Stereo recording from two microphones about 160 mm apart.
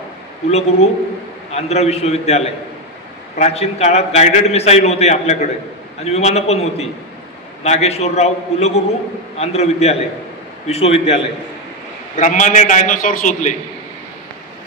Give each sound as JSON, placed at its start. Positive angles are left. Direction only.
{"t": 0.5, "sound": "a man's voice", "side_deg": 40}
{"t": 12.2, "sound": "a man's voice", "side_deg": 50}